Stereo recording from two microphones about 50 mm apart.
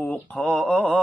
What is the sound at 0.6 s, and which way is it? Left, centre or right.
Speech, left.